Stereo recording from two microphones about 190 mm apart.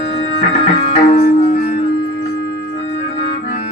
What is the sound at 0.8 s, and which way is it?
Music, 35° left (ahead or behind).